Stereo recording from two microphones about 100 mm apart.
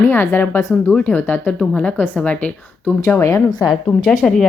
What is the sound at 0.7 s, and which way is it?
Speech, 10° left (ahead or behind).